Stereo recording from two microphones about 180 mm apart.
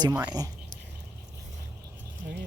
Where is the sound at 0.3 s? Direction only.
20° right (ahead or behind).